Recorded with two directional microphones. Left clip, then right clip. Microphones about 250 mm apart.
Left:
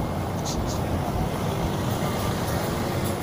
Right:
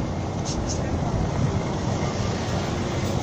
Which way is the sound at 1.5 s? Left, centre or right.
Left.